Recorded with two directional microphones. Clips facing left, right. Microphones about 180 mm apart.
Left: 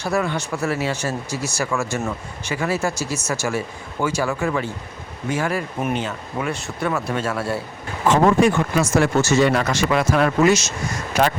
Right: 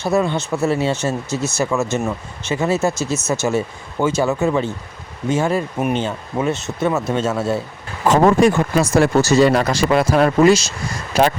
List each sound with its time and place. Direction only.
0.0 s speech: 20° right (ahead or behind)
8.0 s speech: 40° right (ahead or behind)